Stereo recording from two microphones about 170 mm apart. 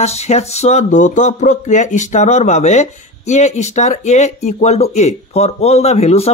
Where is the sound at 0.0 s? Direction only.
40° left (ahead or behind).